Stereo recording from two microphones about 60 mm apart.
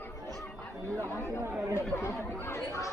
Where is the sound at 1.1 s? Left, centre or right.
Left.